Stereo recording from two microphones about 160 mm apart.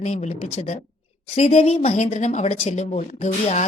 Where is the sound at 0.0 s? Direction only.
45° left (ahead or behind).